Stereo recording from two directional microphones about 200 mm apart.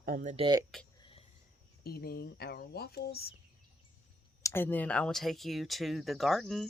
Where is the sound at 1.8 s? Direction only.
50° left (ahead or behind).